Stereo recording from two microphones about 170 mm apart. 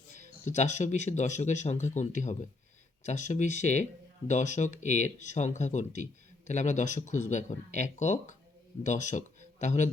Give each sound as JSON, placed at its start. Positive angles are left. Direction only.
{"t": 0.4, "sound": "speech", "side_deg": 45}